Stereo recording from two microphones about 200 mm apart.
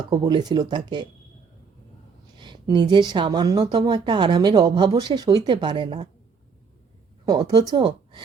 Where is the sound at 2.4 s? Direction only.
20° right (ahead or behind).